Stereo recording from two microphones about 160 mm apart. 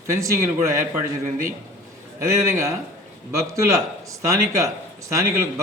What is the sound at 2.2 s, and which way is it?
Speech, 20° right (ahead or behind).